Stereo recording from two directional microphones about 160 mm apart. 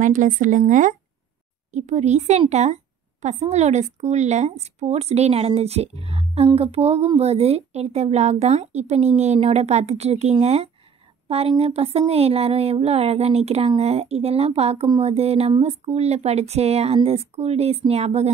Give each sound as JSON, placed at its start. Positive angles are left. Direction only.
{"t": 0.0, "sound": "speech", "side_deg": -55}